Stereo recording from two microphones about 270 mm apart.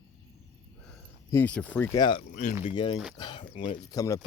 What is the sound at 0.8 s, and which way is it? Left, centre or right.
Speech, centre.